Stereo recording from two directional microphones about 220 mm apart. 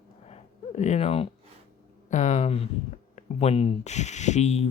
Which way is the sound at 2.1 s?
35° left (ahead or behind).